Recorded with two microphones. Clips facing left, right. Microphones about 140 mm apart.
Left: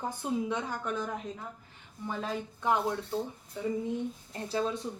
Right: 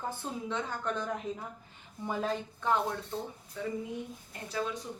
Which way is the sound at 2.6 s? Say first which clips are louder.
Left 3 dB; 15° left (ahead or behind).